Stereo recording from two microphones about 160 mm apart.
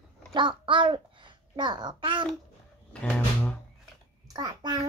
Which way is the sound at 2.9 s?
5° left (ahead or behind).